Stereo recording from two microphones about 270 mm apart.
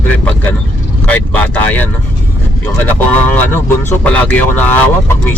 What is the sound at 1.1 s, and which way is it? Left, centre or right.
Speech, centre.